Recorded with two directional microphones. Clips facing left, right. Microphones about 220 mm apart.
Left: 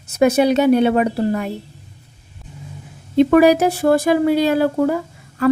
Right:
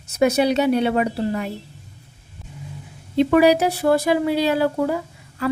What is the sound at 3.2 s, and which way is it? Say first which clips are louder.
Speech: left 3 dB; 50° left (ahead or behind).